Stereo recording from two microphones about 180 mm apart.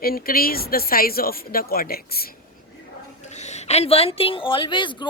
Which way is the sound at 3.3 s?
40° left (ahead or behind).